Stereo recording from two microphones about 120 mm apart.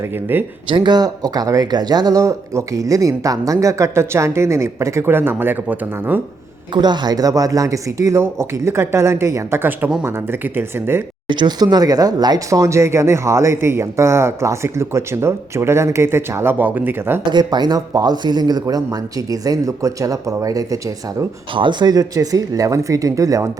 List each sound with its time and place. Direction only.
0.0 s speech: 15° right (ahead or behind)
0.7 s speech: 40° right (ahead or behind); by 6.1 s 15° right (ahead or behind)
6.7 s speech: 35° right (ahead or behind); by 11.0 s 20° right (ahead or behind)
11.3 s speech: 40° right (ahead or behind); by 17.2 s 15° right (ahead or behind)
17.3 s speech: 35° right (ahead or behind)
21.5 s speech: 40° right (ahead or behind)